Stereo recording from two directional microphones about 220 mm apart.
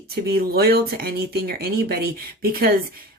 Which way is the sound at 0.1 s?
45° right (ahead or behind).